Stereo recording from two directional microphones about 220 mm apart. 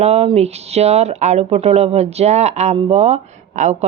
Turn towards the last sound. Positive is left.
turn(degrees=-30)  # may be behind; listen again after turning